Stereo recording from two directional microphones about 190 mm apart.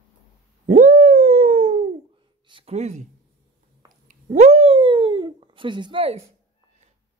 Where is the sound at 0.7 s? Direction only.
40° right (ahead or behind).